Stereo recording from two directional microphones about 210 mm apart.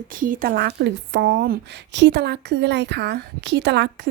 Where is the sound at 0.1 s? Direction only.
40° right (ahead or behind).